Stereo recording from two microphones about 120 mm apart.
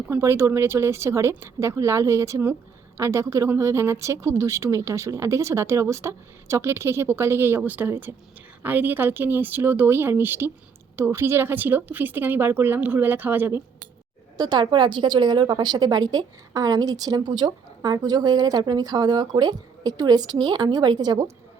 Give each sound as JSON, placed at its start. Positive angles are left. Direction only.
{"t": 0.1, "sound": "a woman's voice", "side_deg": -20}
{"t": 14.3, "sound": "a woman's voice", "side_deg": -35}